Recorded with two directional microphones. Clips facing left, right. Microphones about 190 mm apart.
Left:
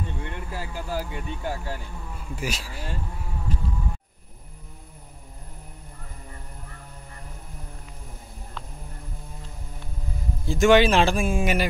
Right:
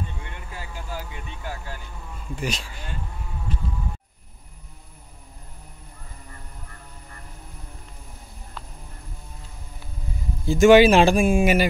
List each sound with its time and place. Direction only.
0.5 s speech: 35° left (ahead or behind)
2.3 s speech: 5° left (ahead or behind)
10.4 s speech: centre (ahead or behind)